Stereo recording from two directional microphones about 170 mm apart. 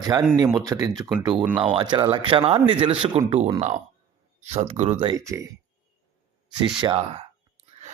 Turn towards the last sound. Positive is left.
turn(degrees=-35)  # may be behind; listen again after turning